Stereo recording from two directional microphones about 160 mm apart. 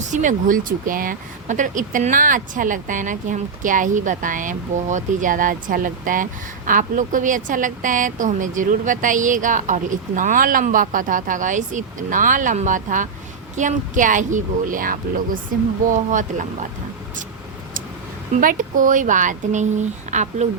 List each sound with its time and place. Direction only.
0.0 s speech: 50° right (ahead or behind)
18.3 s speech: 55° right (ahead or behind)